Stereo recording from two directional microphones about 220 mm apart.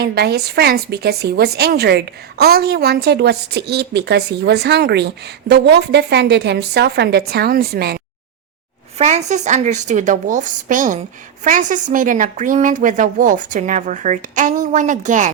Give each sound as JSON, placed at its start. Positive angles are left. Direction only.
{"t": 0.0, "sound": "a woman's voice", "side_deg": -45}
{"t": 9.0, "sound": "speech", "side_deg": -30}